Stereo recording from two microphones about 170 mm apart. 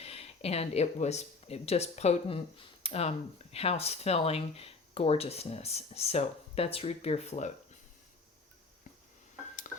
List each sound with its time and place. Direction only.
0.0 s speech: 35° left (ahead or behind)
9.7 s music: 50° left (ahead or behind)